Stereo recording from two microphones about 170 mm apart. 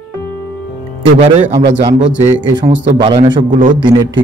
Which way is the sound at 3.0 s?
30° right (ahead or behind).